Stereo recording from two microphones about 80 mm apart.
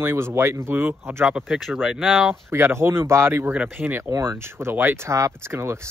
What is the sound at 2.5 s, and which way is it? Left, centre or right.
Speech, right.